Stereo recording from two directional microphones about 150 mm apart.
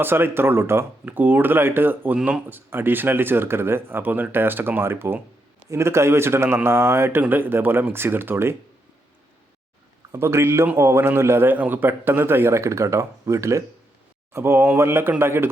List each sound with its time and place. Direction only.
0.0 s speech: 15° right (ahead or behind)
10.1 s speech: 15° right (ahead or behind)